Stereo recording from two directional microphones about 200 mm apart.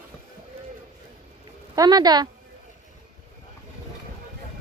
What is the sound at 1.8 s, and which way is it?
Speech, 20° right (ahead or behind).